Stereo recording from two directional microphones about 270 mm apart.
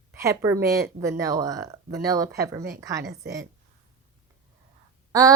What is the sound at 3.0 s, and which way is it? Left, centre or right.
Speech, right.